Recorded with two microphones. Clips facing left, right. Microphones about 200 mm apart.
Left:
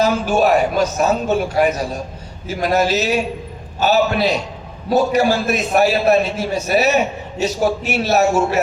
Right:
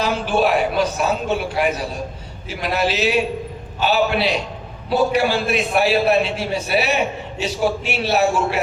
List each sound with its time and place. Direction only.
0.0 s a man's voice: 45° left (ahead or behind)